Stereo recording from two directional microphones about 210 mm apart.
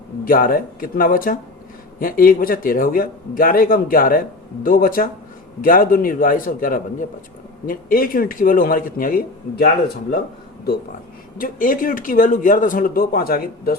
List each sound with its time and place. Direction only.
0.3 s a man's voice: 40° left (ahead or behind)
11.3 s speech: 40° left (ahead or behind)